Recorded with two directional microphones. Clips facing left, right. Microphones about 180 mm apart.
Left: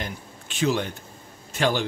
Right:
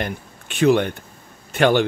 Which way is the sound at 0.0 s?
60° right (ahead or behind).